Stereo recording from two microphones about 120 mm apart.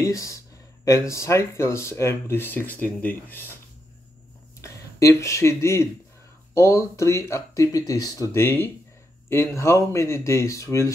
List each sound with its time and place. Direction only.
0.0 s speech: 25° left (ahead or behind)
4.6 s speech: 25° left (ahead or behind)